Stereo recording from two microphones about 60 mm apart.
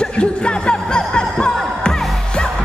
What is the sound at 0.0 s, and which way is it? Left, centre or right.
Music, centre.